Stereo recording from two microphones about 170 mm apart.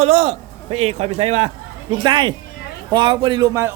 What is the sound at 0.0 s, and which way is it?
A man's voice, 35° right (ahead or behind).